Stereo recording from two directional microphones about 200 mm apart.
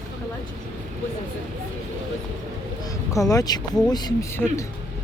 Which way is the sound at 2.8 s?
15° left (ahead or behind).